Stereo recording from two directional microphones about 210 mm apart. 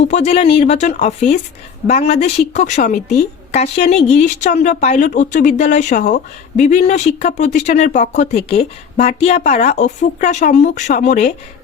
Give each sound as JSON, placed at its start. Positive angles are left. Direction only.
{"t": 0.0, "sound": "a woman's voice", "side_deg": 30}